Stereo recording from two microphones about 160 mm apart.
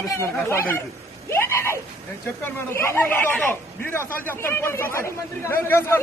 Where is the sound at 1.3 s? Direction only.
15° left (ahead or behind).